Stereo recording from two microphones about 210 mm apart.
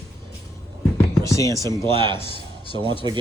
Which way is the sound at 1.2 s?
15° left (ahead or behind).